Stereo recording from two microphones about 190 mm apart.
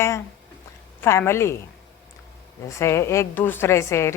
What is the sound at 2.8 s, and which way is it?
A woman's voice, 15° left (ahead or behind).